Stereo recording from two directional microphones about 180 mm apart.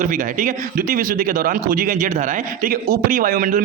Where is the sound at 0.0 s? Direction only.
45° right (ahead or behind).